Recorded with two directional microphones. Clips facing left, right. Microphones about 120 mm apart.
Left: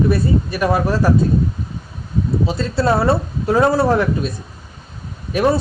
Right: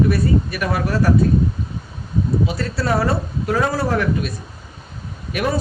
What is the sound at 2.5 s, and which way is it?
Speech, 25° left (ahead or behind).